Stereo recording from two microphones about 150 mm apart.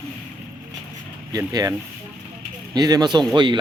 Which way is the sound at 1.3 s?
25° right (ahead or behind).